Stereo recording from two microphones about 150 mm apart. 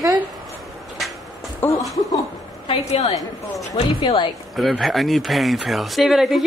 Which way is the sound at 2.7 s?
45° left (ahead or behind).